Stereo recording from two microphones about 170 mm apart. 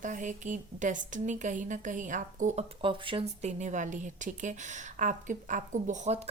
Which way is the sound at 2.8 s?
30° right (ahead or behind).